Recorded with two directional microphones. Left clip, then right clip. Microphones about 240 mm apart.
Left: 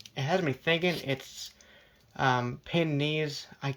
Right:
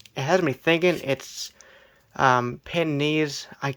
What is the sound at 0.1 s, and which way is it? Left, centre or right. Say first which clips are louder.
Speech: right 7 dB; centre.